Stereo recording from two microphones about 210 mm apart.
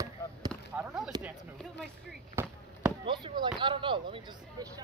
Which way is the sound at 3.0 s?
20° right (ahead or behind).